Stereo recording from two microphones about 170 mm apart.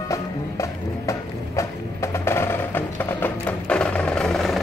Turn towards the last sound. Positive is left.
turn(degrees=0)  # may be behind; listen again after turning